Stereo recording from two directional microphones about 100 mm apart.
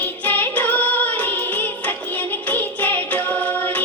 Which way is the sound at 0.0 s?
20° left (ahead or behind).